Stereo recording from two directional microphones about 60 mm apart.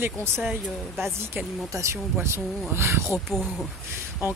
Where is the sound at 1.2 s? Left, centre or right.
Right.